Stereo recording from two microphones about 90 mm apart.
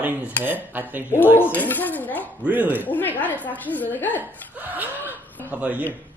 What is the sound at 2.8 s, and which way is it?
A man's voice, 20° left (ahead or behind).